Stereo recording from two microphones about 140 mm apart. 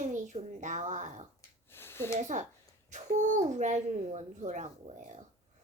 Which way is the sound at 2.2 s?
60° right (ahead or behind).